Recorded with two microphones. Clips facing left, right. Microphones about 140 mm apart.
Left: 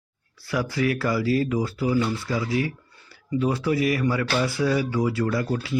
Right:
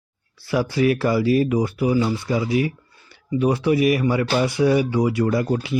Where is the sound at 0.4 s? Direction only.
25° right (ahead or behind).